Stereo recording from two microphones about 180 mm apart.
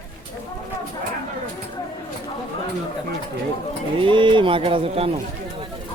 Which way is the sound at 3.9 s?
30° right (ahead or behind).